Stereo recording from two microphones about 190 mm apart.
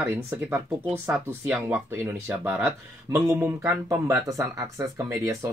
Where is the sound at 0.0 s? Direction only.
10° right (ahead or behind).